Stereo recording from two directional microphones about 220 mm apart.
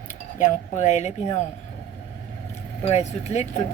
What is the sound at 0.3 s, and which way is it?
Speech, 35° left (ahead or behind).